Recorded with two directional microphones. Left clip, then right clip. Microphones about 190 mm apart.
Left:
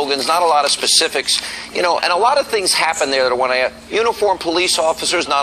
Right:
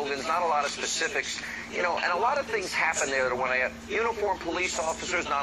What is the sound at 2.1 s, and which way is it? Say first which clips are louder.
Speech: left 12 dB; 35° left (ahead or behind).